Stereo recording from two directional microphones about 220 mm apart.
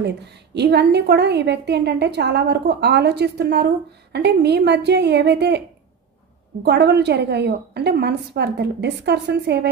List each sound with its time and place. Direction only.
0.0 s a woman's voice: 50° right (ahead or behind)
6.6 s a woman's voice: 50° right (ahead or behind)